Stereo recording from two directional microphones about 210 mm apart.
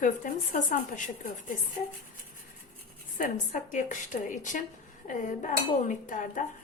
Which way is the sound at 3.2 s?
40° left (ahead or behind).